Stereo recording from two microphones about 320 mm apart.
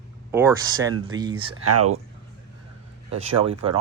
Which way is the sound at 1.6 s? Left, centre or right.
Right.